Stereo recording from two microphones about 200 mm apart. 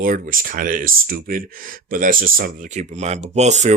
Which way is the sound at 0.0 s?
45° right (ahead or behind).